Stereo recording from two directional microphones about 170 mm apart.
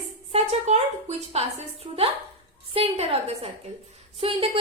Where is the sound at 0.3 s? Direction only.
40° right (ahead or behind).